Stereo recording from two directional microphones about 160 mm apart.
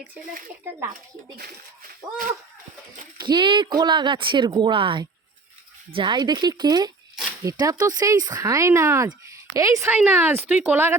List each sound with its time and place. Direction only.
3.2 s speech: 30° right (ahead or behind); by 10.9 s 10° right (ahead or behind)